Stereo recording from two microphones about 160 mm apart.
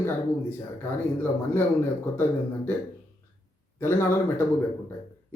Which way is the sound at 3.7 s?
15° left (ahead or behind).